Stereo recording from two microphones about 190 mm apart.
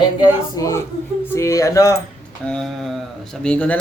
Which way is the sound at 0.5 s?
15° left (ahead or behind).